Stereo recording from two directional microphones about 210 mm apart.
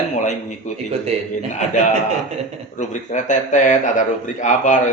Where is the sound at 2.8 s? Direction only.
35° left (ahead or behind).